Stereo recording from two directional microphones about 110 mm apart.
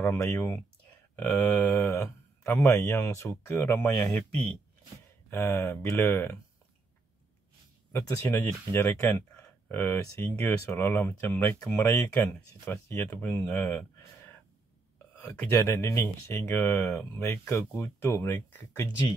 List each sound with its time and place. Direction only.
0.0 s speech: 20° left (ahead or behind)
1.1 s a sound: 15° left (ahead or behind)
1.7 s speech: 25° left (ahead or behind)
4.0 s a sound: 10° left (ahead or behind)
5.3 s speech: 25° left (ahead or behind)
8.1 s speech: 25° left (ahead or behind)